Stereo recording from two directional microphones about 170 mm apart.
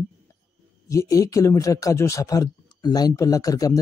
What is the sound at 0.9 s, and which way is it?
Speech, 20° left (ahead or behind).